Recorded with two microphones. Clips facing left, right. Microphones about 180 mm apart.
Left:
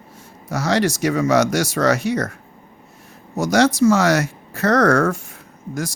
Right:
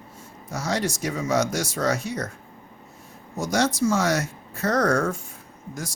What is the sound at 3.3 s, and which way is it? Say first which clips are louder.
Speech: left 7 dB; 80° left.